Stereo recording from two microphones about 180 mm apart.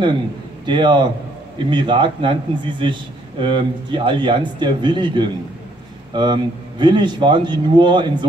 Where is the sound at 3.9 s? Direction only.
25° right (ahead or behind).